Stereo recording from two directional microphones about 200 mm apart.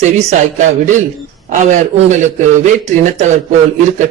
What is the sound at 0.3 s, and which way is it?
A woman's voice, 40° right (ahead or behind).